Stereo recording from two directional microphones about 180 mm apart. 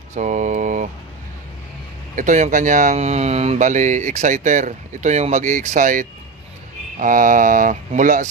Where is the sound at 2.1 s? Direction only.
40° right (ahead or behind).